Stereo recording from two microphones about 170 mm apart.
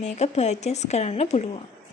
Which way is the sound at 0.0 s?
40° left (ahead or behind).